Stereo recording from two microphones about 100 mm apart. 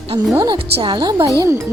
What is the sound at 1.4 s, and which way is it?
Speech, 25° right (ahead or behind).